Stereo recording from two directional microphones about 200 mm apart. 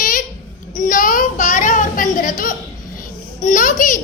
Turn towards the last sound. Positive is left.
turn(degrees=40)  # may be behind; listen again after turning